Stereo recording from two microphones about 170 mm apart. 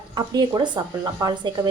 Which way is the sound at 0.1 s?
25° right (ahead or behind).